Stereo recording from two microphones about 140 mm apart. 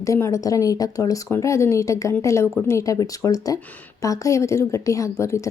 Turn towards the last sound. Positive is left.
turn(degrees=20)  # may be behind; listen again after turning